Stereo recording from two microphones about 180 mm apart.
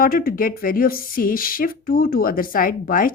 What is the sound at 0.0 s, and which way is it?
A woman's voice, 55° left (ahead or behind).